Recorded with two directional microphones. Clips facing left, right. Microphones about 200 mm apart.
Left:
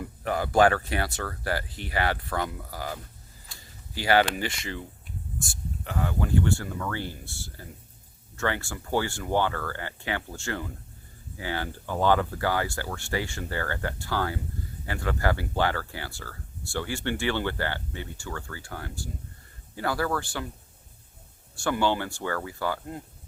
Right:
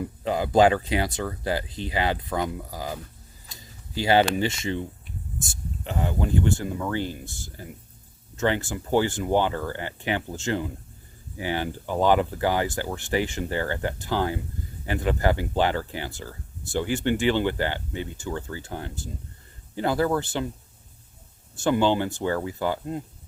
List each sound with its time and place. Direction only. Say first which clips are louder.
0.0 s speech: right 3 dB; 20° right (ahead or behind)
3.5 s a sound: right 6 dB; 20° right (ahead or behind)
4.4 s speech: right 7 dB; 25° right (ahead or behind)
21.5 s speech: right 4 dB; 20° right (ahead or behind)